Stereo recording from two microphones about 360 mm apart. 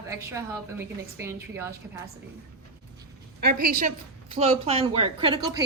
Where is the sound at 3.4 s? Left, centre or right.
Right.